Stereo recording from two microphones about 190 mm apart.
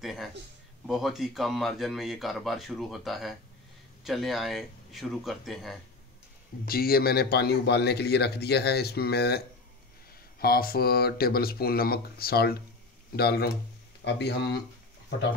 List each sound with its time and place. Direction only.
0.0 s speech: centre (ahead or behind)
6.6 s a man's voice: 50° left (ahead or behind)
10.4 s a man's voice: 50° left (ahead or behind)